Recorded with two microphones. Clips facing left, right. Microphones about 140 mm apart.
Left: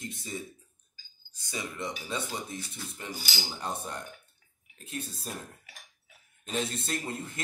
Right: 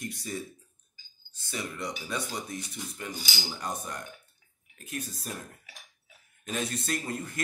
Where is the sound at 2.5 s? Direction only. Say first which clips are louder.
Right 2 dB; 15° right (ahead or behind).